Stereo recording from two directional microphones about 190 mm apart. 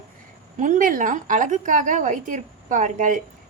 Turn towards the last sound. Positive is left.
turn(degrees=-45)  # may be behind; listen again after turning